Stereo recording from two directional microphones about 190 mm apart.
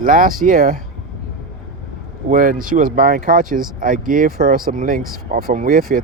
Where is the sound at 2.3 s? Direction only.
45° right (ahead or behind).